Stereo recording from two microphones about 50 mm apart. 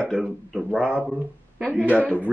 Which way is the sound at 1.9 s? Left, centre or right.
Left.